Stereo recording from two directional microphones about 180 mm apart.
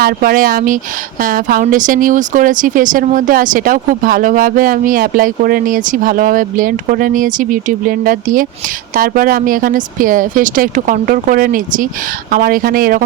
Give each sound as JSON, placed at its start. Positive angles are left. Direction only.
{"t": 0.0, "sound": "speech", "side_deg": -55}